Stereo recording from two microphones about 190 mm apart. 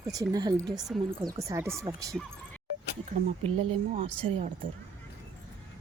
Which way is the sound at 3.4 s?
35° right (ahead or behind).